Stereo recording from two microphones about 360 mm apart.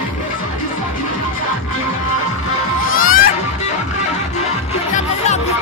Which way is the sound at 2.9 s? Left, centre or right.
Left.